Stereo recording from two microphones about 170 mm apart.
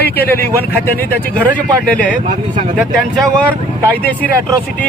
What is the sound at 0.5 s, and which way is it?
Speech, 10° left (ahead or behind).